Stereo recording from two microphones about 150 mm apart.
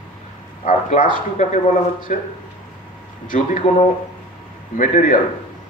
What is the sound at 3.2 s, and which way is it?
Speech, 60° left (ahead or behind).